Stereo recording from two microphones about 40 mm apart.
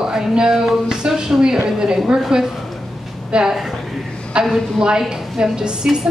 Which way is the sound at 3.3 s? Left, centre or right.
Right.